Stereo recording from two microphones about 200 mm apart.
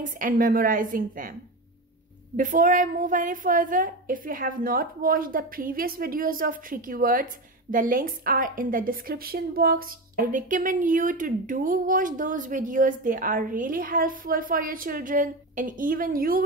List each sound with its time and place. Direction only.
0.0 s a woman's voice: 40° right (ahead or behind)
2.3 s a woman's voice: 40° right (ahead or behind)